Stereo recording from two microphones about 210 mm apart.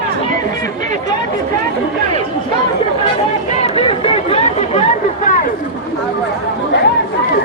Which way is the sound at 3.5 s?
30° left (ahead or behind).